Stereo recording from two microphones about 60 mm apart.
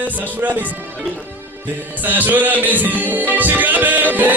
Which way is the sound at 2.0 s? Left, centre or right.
Right.